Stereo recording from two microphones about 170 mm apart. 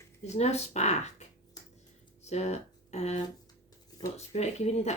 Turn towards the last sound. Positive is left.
turn(degrees=40)  # may be behind; listen again after turning